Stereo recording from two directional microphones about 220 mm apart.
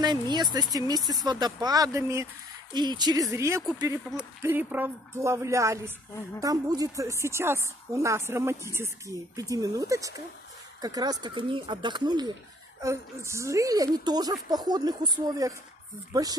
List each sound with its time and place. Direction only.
0.0 s a woman's voice: 20° right (ahead or behind)